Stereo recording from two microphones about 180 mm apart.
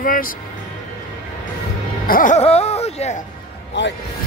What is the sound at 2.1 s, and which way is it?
Speech, 45° left (ahead or behind).